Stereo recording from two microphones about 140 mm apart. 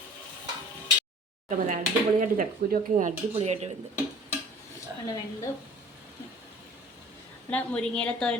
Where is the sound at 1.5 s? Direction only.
60° right (ahead or behind).